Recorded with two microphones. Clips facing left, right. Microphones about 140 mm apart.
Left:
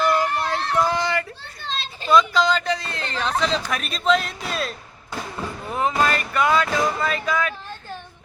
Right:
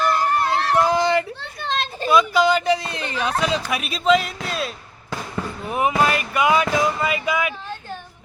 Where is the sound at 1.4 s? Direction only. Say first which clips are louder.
Right 6 dB; 55° right (ahead or behind).